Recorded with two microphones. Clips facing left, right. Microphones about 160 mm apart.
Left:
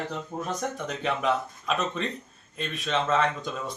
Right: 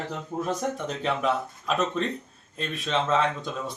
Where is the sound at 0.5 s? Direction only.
Centre (ahead or behind).